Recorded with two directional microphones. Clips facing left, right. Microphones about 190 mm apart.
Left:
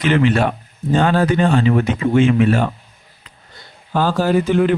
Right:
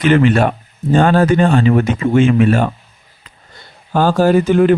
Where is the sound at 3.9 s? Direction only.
45° right (ahead or behind).